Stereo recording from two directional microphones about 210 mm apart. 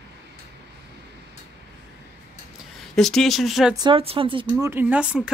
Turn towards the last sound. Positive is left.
turn(degrees=-5)  # may be behind; listen again after turning